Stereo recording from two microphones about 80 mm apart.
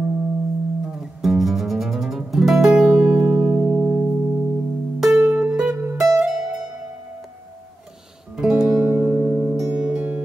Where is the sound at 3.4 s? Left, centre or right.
Centre.